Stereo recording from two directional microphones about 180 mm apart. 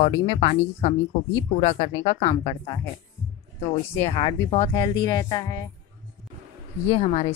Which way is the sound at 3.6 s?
30° left (ahead or behind).